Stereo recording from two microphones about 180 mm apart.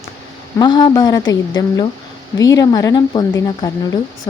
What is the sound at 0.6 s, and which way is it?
Speech, 25° left (ahead or behind).